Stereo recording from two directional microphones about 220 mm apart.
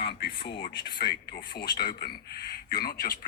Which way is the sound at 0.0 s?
50° left (ahead or behind).